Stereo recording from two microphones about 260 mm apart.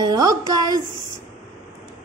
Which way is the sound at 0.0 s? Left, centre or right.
Centre.